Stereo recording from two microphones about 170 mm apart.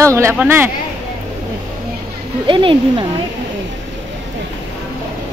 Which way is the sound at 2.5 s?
30° right (ahead or behind).